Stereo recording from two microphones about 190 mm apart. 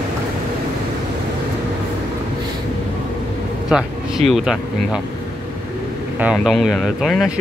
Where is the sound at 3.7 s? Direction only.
Centre (ahead or behind).